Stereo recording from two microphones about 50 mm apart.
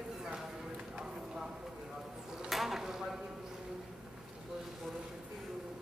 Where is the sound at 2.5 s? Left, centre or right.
Centre.